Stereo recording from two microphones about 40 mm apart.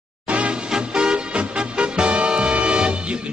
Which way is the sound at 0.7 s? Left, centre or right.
Right.